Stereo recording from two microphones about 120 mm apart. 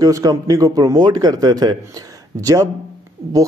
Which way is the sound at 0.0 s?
30° right (ahead or behind).